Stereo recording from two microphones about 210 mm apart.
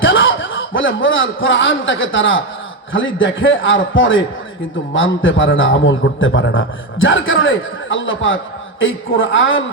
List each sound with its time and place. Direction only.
0.0 s a man's voice: 65° left (ahead or behind)